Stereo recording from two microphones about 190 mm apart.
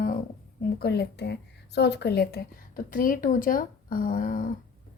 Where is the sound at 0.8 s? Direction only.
60° left (ahead or behind).